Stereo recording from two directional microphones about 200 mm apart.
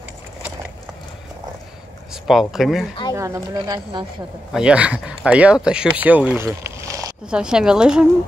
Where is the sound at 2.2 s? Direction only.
Centre (ahead or behind).